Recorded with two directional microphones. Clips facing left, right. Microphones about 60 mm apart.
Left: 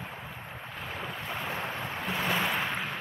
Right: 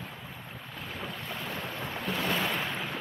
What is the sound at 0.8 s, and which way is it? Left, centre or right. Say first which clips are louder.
Waves: left 1 dB; centre.